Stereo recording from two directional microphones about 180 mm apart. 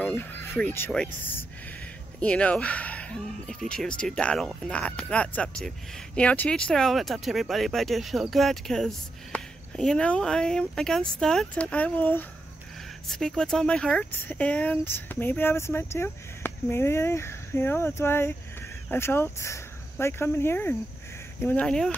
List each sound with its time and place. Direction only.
0.0 s speech: 10° left (ahead or behind)